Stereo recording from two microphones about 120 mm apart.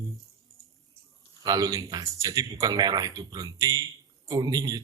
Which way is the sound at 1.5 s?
30° right (ahead or behind).